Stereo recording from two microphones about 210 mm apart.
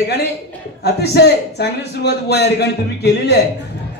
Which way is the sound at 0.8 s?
50° left (ahead or behind).